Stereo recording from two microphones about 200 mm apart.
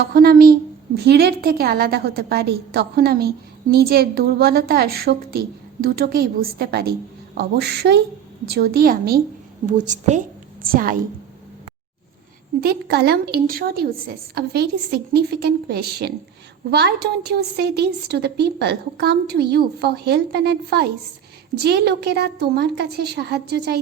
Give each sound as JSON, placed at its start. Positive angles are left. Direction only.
{"t": 0.1, "sound": "a woman's voice", "side_deg": -50}
{"t": 9.7, "sound": "a woman's voice", "side_deg": -40}
{"t": 12.5, "sound": "a woman's voice", "side_deg": -50}